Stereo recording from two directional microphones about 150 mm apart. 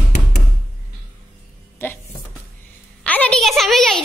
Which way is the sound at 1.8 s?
15° left (ahead or behind).